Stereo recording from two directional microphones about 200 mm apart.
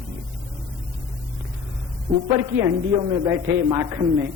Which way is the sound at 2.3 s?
20° right (ahead or behind).